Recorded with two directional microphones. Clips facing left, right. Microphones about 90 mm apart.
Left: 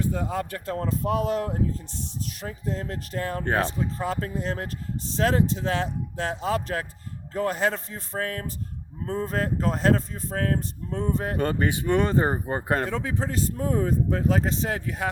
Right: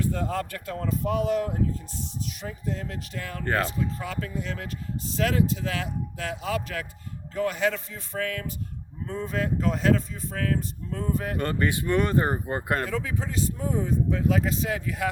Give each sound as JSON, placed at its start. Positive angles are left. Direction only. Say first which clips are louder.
{"t": 0.0, "sound": "speech", "louder": "even", "side_deg": 15}
{"t": 0.5, "sound": "speech", "louder": "left 2 dB", "side_deg": 35}
{"t": 3.4, "sound": "speech", "louder": "right 1 dB", "side_deg": 25}